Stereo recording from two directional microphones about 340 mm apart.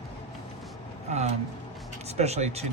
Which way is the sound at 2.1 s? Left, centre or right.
Centre.